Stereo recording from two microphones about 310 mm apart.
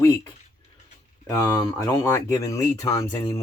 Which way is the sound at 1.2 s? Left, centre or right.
Centre.